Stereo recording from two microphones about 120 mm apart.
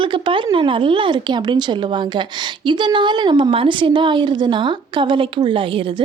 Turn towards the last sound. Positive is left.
turn(degrees=-45)  # may be behind; listen again after turning